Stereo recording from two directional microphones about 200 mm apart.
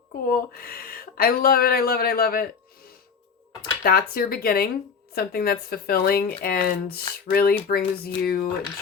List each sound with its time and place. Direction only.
0.3 s speech: 50° left (ahead or behind)
3.6 s speech: 50° left (ahead or behind)